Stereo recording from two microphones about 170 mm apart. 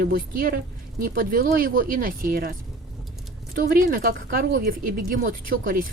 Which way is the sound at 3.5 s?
60° right (ahead or behind).